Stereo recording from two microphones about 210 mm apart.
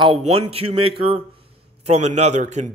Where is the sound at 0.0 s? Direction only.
30° right (ahead or behind).